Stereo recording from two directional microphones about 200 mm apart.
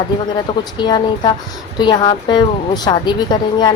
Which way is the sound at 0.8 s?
20° left (ahead or behind).